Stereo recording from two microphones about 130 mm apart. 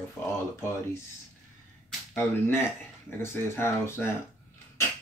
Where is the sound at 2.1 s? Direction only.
15° left (ahead or behind).